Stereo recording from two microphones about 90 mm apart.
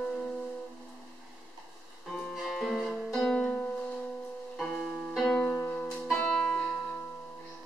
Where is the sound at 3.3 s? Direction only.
15° left (ahead or behind).